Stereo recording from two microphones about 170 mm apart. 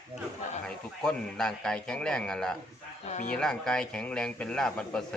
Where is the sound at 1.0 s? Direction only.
5° left (ahead or behind).